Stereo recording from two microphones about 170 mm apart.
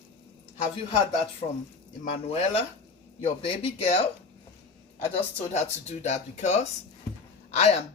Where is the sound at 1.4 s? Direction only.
45° left (ahead or behind).